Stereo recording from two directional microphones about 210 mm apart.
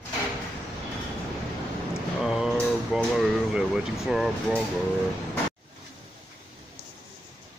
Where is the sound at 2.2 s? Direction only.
Centre (ahead or behind).